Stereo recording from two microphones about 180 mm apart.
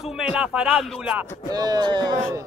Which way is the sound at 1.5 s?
20° right (ahead or behind).